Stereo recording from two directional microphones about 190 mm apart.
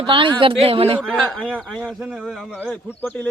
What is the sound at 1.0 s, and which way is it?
Speech, centre (ahead or behind).